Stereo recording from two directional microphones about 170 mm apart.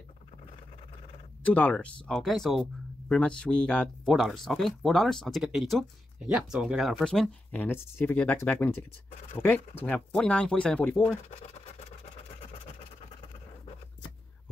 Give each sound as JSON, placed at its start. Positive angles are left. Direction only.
{"t": 1.4, "sound": "speech", "side_deg": 10}
{"t": 11.2, "sound": "scratch", "side_deg": 40}